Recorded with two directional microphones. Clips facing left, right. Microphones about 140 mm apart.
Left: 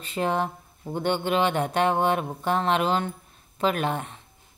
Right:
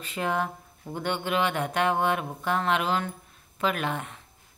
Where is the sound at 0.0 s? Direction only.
30° left (ahead or behind).